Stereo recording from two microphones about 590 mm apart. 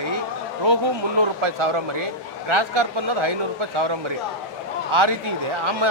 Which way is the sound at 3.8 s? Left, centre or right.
Right.